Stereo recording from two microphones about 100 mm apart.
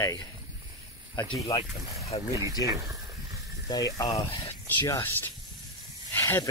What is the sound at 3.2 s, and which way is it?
Snake, 35° right (ahead or behind).